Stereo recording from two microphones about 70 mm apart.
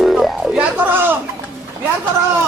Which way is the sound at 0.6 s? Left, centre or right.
Right.